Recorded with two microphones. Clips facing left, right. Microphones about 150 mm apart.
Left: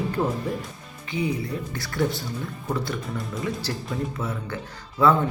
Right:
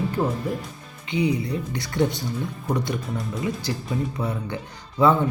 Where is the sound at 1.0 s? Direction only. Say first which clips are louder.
Right 4 dB; 20° right (ahead or behind).